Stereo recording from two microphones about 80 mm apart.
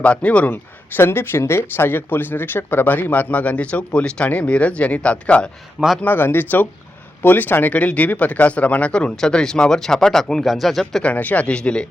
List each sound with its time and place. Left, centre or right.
0.0 s speech: centre
11.0 s speech: centre